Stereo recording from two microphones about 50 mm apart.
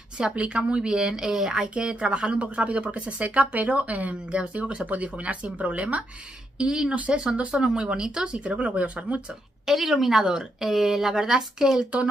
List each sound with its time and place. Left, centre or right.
0.4 s speech: right
9.9 s speech: centre